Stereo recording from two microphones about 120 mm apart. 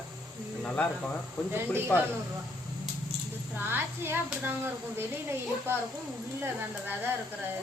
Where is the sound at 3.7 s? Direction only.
15° right (ahead or behind).